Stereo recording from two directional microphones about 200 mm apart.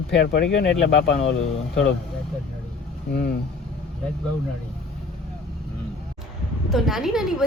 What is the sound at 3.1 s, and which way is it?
Speech, 55° left (ahead or behind).